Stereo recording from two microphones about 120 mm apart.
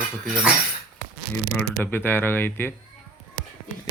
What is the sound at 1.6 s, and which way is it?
Speech, 15° left (ahead or behind).